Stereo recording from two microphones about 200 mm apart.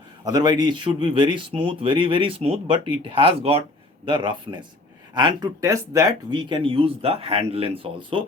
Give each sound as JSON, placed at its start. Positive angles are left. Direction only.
{"t": 0.3, "sound": "speech", "side_deg": -20}